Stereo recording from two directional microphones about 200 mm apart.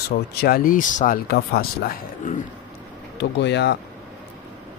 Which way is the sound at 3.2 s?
60° left (ahead or behind).